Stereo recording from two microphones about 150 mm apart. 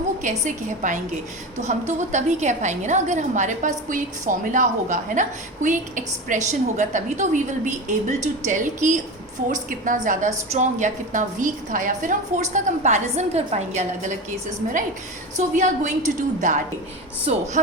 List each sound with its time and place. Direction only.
0.2 s a woman's voice: 55° right (ahead or behind)
6.2 s a woman's voice: 55° right (ahead or behind)